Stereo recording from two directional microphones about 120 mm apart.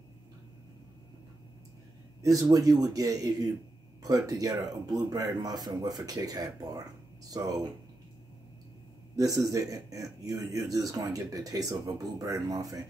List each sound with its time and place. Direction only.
2.2 s speech: 30° right (ahead or behind)
9.1 s speech: 30° right (ahead or behind)